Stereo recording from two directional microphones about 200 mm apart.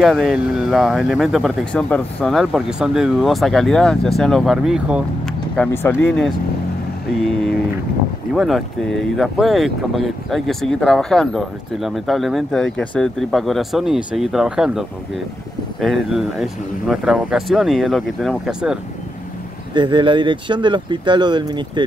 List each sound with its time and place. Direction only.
0.0 s speech: centre (ahead or behind)
5.6 s speech: 10° left (ahead or behind)
7.2 s speech: centre (ahead or behind)
19.7 s speech: 25° right (ahead or behind)